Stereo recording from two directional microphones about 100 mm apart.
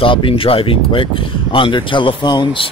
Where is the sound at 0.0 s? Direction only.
60° left (ahead or behind).